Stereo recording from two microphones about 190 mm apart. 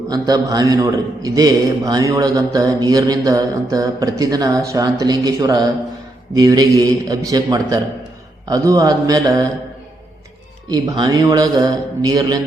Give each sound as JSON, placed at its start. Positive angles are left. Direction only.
{"t": 0.1, "sound": "a man's voice", "side_deg": -20}
{"t": 10.7, "sound": "a man's voice", "side_deg": -20}